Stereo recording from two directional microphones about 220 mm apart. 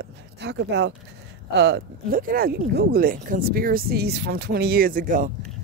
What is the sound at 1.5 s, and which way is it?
Speech, 50° right (ahead or behind).